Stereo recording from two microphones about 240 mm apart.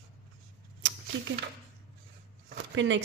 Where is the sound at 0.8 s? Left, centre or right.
Right.